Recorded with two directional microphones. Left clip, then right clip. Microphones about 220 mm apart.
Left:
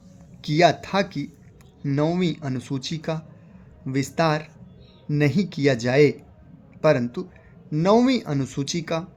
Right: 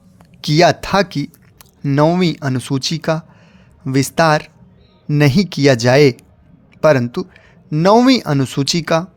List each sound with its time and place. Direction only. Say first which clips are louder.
0.4 s speech: right 6 dB; 50° right (ahead or behind)